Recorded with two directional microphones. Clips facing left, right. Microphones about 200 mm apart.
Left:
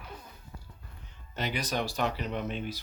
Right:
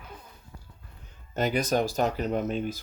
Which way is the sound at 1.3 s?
45° right (ahead or behind).